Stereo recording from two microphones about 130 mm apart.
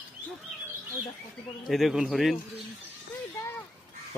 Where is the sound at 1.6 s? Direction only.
Centre (ahead or behind).